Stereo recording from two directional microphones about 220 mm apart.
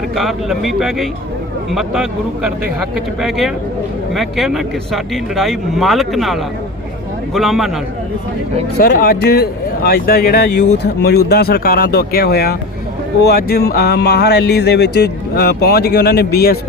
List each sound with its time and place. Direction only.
0.2 s speech: centre (ahead or behind)
8.8 s speech: 45° left (ahead or behind)